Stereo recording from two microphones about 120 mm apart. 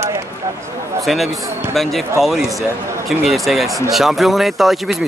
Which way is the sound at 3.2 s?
Centre (ahead or behind).